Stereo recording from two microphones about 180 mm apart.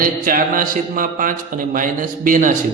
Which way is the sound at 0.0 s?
50° right (ahead or behind).